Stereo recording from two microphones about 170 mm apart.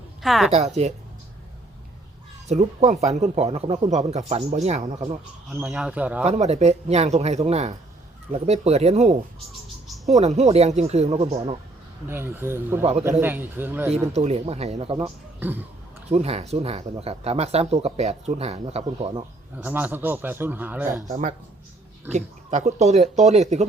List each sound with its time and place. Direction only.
0.2 s a woman's voice: centre (ahead or behind)
0.5 s speech: 40° right (ahead or behind)
2.5 s speech: 40° right (ahead or behind)
5.5 s a man's voice: 5° right (ahead or behind)
6.2 s speech: 40° right (ahead or behind)
12.0 s a man's voice: 15° right (ahead or behind)
14.1 s speech: 40° right (ahead or behind)
15.0 s a man's voice: 10° right (ahead or behind)
16.1 s speech: 40° right (ahead or behind)
19.5 s a man's voice: 10° right (ahead or behind)
21.1 s speech: 50° right (ahead or behind)